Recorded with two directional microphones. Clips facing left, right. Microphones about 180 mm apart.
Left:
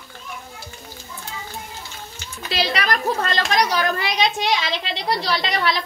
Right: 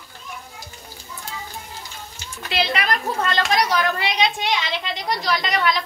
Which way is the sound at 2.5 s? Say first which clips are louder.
Even; 40° left (ahead or behind).